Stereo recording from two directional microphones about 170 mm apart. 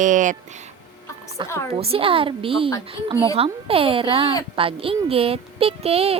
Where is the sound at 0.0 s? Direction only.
50° right (ahead or behind).